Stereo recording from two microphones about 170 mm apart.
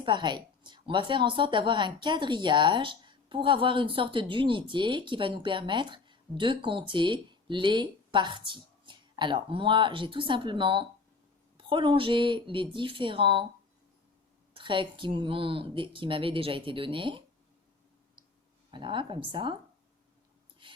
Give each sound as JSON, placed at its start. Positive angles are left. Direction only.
{"t": 0.0, "sound": "a woman's voice", "side_deg": -25}
{"t": 14.5, "sound": "speech", "side_deg": -30}
{"t": 18.7, "sound": "a woman's voice", "side_deg": -30}
{"t": 20.6, "sound": "a sound", "side_deg": -30}